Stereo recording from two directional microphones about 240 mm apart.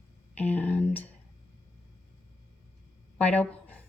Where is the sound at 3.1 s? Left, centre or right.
Centre.